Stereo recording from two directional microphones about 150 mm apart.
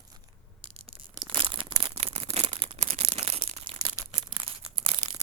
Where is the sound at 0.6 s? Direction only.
40° right (ahead or behind).